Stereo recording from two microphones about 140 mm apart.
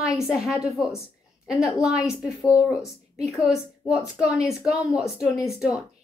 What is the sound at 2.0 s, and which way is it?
Speech, 20° left (ahead or behind).